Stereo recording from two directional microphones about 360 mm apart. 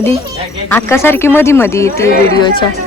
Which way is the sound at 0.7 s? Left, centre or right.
Centre.